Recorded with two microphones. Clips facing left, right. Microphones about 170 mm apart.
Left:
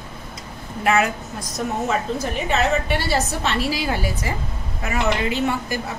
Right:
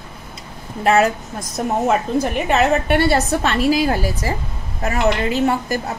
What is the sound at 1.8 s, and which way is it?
A woman's voice, 60° right (ahead or behind).